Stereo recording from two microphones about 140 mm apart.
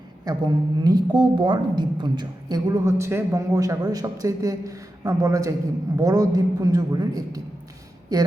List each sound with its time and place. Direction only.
0.3 s a woman's voice: 30° right (ahead or behind)